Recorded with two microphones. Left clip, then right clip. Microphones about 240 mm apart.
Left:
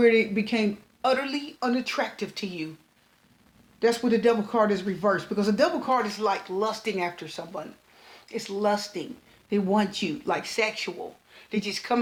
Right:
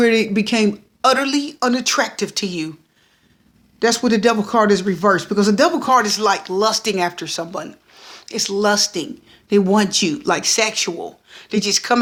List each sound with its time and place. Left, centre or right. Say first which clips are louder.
0.0 s speech: right 5 dB; right
3.8 s speech: right 6 dB; right